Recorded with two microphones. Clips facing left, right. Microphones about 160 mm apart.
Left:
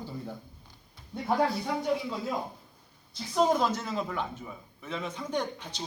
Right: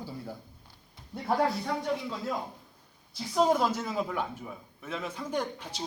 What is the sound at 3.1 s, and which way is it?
Speech, 5° right (ahead or behind).